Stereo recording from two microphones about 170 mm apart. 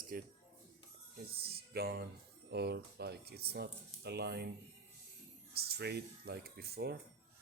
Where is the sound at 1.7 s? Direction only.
65° right (ahead or behind).